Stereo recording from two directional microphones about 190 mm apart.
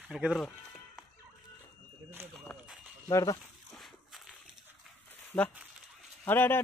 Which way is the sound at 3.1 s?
15° left (ahead or behind).